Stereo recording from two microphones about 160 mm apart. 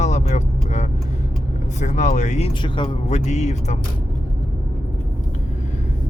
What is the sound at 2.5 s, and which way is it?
Speech, 30° left (ahead or behind).